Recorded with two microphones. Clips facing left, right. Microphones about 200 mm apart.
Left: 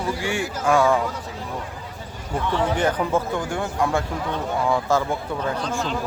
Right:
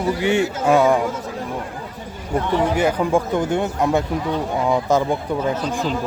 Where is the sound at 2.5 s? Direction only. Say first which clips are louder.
Right 3 dB; 10° right (ahead or behind).